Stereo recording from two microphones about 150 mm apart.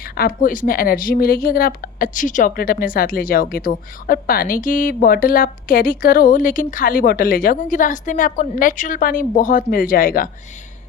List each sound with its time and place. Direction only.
0.0 s a woman's voice: 70° left (ahead or behind)